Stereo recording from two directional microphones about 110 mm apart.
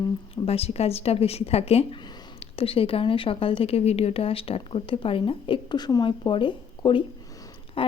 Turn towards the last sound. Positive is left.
turn(degrees=55)  # may be behind; listen again after turning